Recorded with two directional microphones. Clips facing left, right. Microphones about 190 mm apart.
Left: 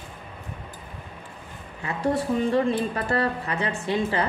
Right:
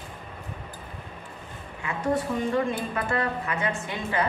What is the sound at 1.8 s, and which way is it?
Speech, 35° left (ahead or behind).